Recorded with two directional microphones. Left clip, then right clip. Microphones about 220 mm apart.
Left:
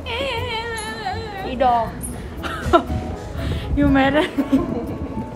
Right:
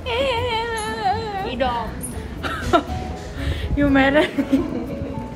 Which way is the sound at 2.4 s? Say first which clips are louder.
Left 2 dB; 15° left (ahead or behind).